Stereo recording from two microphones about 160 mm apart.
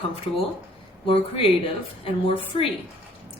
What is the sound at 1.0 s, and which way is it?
A woman's voice, 35° left (ahead or behind).